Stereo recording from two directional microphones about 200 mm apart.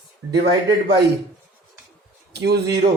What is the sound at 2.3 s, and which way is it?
Speech, 55° right (ahead or behind).